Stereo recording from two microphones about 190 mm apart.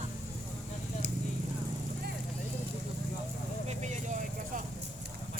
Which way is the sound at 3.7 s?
40° right (ahead or behind).